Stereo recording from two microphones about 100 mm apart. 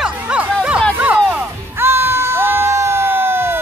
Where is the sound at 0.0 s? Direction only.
10° right (ahead or behind).